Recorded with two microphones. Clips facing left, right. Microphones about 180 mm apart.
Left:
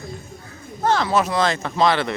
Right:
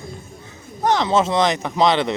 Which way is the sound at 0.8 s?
20° right (ahead or behind).